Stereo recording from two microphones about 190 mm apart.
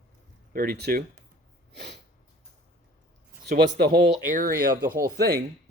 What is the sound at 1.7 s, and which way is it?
Sneeze, 65° right (ahead or behind).